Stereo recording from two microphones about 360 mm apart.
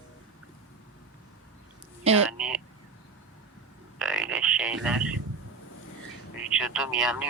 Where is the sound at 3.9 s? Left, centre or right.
Centre.